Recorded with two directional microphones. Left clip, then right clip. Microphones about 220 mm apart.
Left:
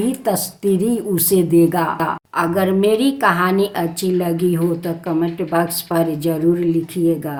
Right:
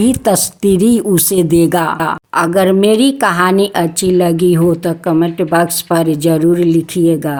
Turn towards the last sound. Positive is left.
turn(degrees=-45)  # may be behind; listen again after turning